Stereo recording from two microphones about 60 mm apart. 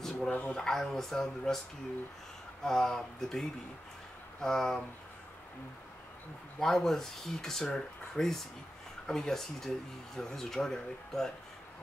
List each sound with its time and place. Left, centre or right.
0.3 s speech: left
0.6 s speech: centre
2.6 s speech: centre
6.6 s speech: centre